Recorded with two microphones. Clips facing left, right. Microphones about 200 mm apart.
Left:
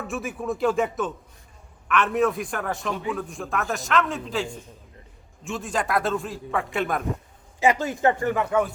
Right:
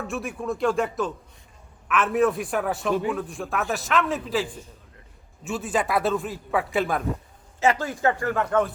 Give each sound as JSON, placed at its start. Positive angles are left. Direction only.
{"t": 0.0, "sound": "a man's voice", "side_deg": 0}
{"t": 7.6, "sound": "speech", "side_deg": 20}
{"t": 8.4, "sound": "a man's voice", "side_deg": 5}